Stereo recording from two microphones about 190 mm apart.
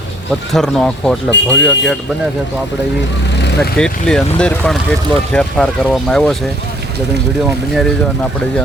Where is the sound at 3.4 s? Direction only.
60° left (ahead or behind).